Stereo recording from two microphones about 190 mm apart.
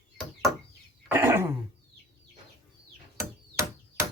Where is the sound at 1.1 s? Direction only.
10° right (ahead or behind).